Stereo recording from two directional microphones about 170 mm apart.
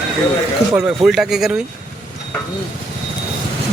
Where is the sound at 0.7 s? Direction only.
5° right (ahead or behind).